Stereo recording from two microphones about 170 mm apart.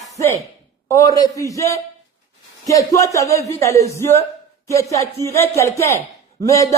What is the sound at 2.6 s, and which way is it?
A man's voice, 20° left (ahead or behind).